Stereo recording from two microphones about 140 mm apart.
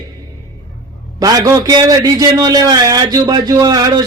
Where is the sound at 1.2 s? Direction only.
25° right (ahead or behind).